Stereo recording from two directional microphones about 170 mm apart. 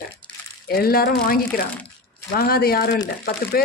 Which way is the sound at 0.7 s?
60° left (ahead or behind).